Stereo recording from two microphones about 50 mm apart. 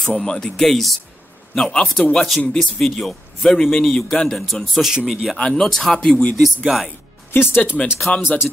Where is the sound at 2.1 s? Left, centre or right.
Centre.